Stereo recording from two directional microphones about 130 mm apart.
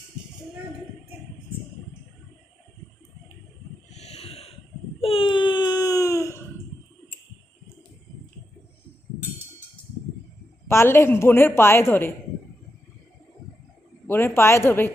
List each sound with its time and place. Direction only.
3.9 s a sound: 55° left (ahead or behind)
4.9 s baby cry: 45° left (ahead or behind); by 6.4 s 25° left (ahead or behind)
10.7 s a woman's voice: 20° left (ahead or behind)
14.1 s a woman's voice: 20° left (ahead or behind)